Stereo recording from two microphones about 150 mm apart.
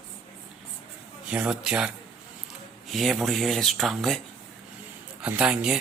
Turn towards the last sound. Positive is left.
turn(degrees=-5)  # may be behind; listen again after turning